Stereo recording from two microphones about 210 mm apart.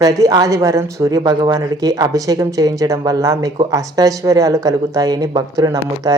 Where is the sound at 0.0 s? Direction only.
15° right (ahead or behind).